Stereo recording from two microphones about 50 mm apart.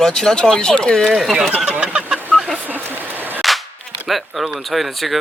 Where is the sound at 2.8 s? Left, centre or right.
Right.